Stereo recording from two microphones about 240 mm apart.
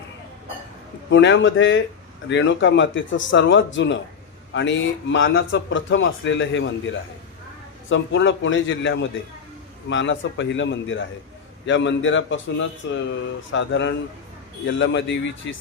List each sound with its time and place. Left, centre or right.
1.1 s a man's voice: left